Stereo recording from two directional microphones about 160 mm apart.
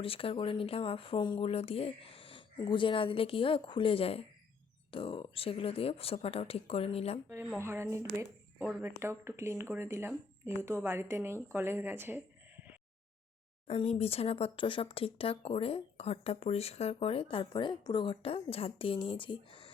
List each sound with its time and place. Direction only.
0.0 s speech: 35° left (ahead or behind)
7.6 s speech: 15° right (ahead or behind)
8.1 s a sound: 15° right (ahead or behind)
8.6 s speech: 15° right (ahead or behind)
13.7 s speech: 40° left (ahead or behind)